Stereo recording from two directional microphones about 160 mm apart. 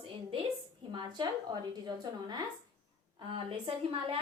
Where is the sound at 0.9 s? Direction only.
30° right (ahead or behind).